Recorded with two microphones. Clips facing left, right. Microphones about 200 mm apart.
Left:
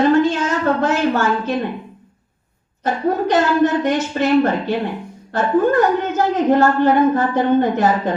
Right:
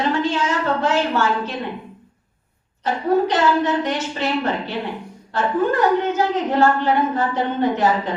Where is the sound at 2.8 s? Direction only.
50° left (ahead or behind).